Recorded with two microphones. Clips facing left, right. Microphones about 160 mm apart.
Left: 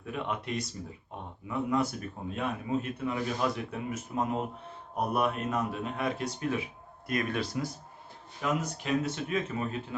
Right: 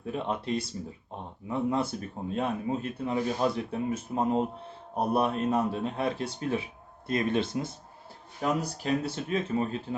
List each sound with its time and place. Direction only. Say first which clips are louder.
0.0 s speech: right 3 dB; 30° right (ahead or behind)
8.4 s speech: right 2 dB; 35° right (ahead or behind)